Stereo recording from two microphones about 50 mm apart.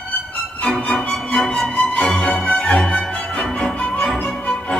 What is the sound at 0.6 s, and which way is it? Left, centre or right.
Music, centre.